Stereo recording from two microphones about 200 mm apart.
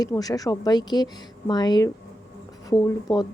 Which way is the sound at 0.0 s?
20° left (ahead or behind).